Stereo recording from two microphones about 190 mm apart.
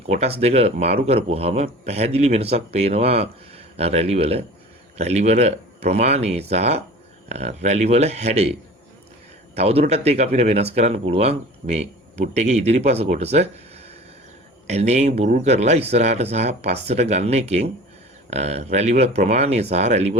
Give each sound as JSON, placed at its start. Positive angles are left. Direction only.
{"t": 0.1, "sound": "speech", "side_deg": -35}
{"t": 9.6, "sound": "speech", "side_deg": -30}